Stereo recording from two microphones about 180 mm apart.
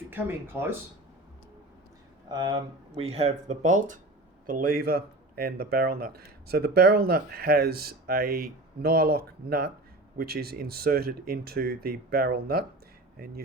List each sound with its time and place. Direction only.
0.1 s speech: 10° right (ahead or behind)
2.3 s speech: 25° right (ahead or behind); by 13.4 s 55° right (ahead or behind)